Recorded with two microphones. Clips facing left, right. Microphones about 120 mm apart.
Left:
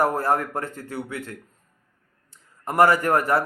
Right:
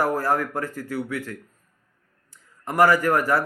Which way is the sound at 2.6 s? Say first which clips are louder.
Even; 25° left (ahead or behind).